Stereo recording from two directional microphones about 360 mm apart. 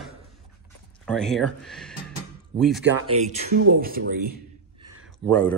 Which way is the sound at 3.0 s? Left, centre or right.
Centre.